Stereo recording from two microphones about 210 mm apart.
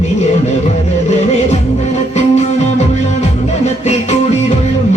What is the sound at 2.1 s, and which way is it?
Music, 30° left (ahead or behind).